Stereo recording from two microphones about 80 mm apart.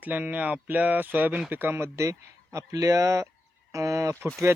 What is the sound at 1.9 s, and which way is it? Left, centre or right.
Speech, right.